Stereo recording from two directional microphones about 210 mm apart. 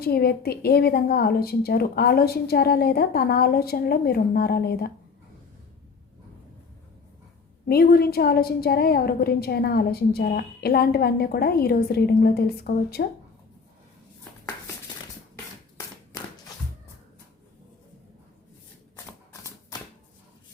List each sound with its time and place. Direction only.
0.0 s a woman's voice: 45° left (ahead or behind)
7.7 s a woman's voice: 45° left (ahead or behind)